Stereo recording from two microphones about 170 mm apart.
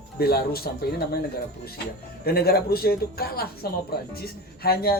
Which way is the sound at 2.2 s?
65° left (ahead or behind).